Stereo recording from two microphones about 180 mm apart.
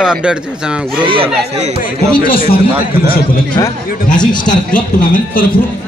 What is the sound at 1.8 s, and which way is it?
Speech, 50° left (ahead or behind).